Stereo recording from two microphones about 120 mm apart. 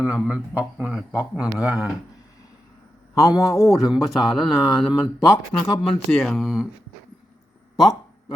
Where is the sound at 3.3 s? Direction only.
25° left (ahead or behind).